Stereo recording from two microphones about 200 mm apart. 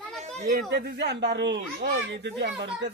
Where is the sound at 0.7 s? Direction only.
55° right (ahead or behind).